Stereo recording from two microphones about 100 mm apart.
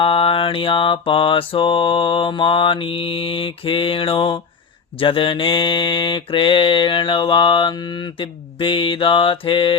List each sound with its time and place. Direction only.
0.0 s mantra: 65° left (ahead or behind)